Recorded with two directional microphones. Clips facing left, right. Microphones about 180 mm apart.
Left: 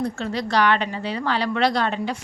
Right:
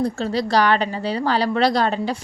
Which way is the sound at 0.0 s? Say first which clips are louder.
Right 4 dB; 35° right (ahead or behind).